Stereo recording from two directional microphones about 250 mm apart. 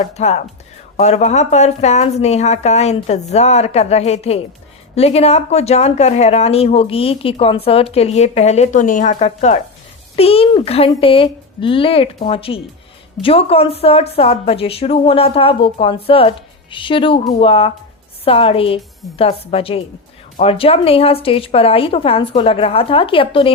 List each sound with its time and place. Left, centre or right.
0.0 s speech: left